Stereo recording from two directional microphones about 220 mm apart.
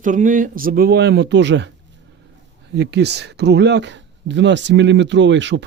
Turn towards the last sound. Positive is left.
turn(degrees=-55)  # may be behind; listen again after turning